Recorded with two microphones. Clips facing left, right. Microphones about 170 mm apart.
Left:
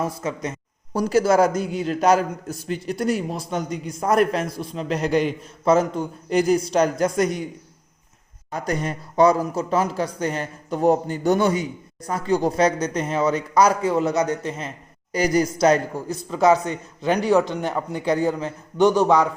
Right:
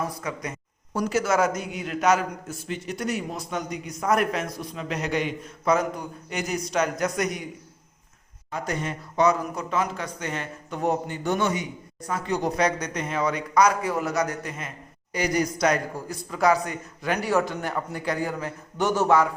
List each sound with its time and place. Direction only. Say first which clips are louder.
0.2 s a man's voice: left 5 dB; 25° left (ahead or behind)
8.4 s a man's voice: left 4 dB; 40° left (ahead or behind); by 19.3 s 15° left (ahead or behind)